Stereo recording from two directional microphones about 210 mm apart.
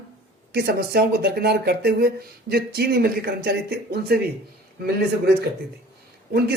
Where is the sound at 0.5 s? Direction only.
50° right (ahead or behind).